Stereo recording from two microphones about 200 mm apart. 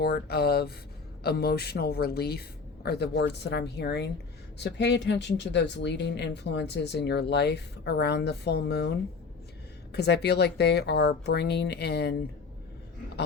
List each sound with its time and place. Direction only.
0.0 s speech: 50° left (ahead or behind)